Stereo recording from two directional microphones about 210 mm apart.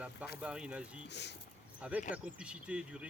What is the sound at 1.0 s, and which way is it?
Speech, 55° left (ahead or behind).